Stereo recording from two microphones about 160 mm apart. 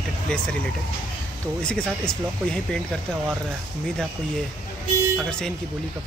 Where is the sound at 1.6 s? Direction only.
5° left (ahead or behind).